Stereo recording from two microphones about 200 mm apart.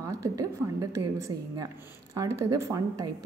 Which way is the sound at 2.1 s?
15° right (ahead or behind).